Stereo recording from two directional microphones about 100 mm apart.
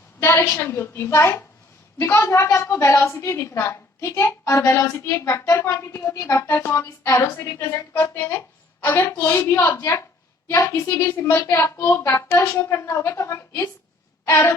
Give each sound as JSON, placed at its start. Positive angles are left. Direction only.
{"t": 0.2, "sound": "a woman's voice", "side_deg": 25}